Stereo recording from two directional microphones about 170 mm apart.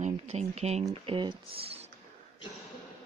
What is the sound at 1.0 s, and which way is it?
Speech, 30° right (ahead or behind).